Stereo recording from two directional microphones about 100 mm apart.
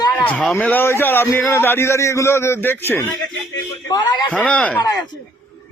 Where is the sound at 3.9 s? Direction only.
40° left (ahead or behind).